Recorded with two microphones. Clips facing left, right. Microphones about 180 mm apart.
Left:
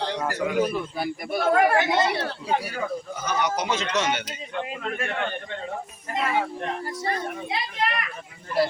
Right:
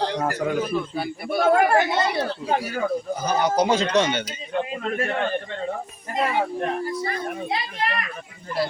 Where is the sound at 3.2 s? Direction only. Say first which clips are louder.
Right 5 dB; 35° right (ahead or behind).